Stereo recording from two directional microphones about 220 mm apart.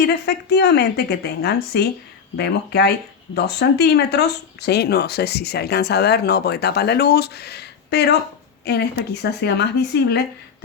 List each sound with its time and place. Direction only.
0.1 s speech: 50° left (ahead or behind)